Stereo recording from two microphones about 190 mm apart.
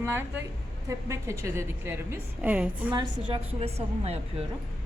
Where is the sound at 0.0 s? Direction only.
10° right (ahead or behind).